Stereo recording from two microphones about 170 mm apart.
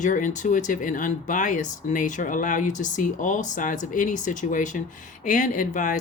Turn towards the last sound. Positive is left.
turn(degrees=45)  # may be behind; listen again after turning